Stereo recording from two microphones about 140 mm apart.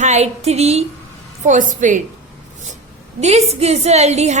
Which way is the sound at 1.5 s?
65° right (ahead or behind).